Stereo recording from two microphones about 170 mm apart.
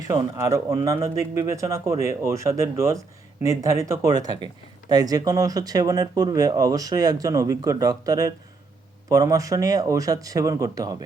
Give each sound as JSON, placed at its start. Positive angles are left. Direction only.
{"t": 0.0, "sound": "speech", "side_deg": -20}